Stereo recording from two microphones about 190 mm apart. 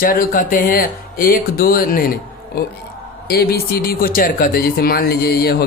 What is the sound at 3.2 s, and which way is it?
Speech, 55° left (ahead or behind).